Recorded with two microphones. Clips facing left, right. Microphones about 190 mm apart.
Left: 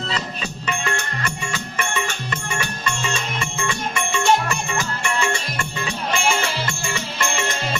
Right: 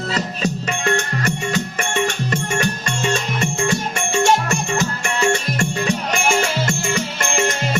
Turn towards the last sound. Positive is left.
turn(degrees=-45)  # may be behind; listen again after turning